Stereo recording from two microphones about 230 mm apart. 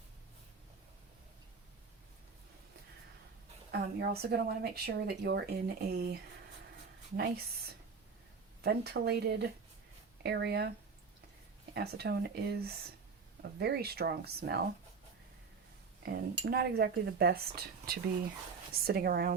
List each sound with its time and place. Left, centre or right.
3.7 s a woman's voice: right
7.2 s a woman's voice: right
11.7 s a woman's voice: right
16.0 s a woman's voice: right